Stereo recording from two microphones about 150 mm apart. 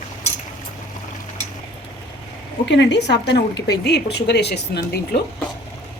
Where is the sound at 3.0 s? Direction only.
90° left.